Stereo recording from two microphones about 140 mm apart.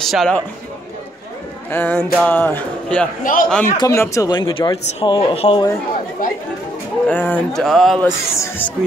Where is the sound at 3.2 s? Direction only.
80° left.